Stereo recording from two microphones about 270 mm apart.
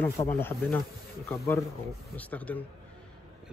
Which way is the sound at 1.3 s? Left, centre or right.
Centre.